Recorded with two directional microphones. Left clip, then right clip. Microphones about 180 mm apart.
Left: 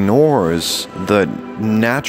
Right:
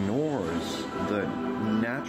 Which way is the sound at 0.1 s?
55° left (ahead or behind).